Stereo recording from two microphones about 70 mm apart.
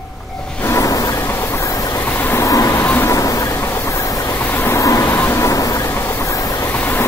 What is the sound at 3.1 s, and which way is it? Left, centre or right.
Vehicle, left.